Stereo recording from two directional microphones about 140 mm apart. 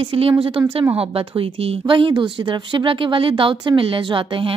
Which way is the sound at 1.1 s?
40° right (ahead or behind).